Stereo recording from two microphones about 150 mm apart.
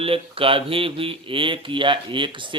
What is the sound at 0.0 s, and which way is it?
A man's voice, 40° right (ahead or behind).